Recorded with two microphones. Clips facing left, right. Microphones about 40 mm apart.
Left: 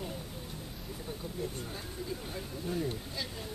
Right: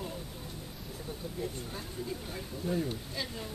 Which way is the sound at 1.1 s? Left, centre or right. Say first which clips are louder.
Even; centre.